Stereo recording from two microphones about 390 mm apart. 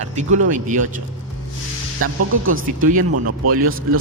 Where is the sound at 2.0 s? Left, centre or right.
Right.